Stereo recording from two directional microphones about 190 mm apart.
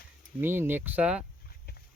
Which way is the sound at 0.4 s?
10° right (ahead or behind).